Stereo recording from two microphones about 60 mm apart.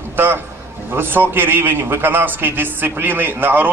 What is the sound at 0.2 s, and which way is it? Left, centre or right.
A man's voice, right.